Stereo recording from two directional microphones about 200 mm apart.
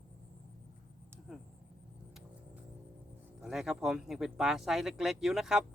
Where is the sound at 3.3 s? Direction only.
Centre (ahead or behind).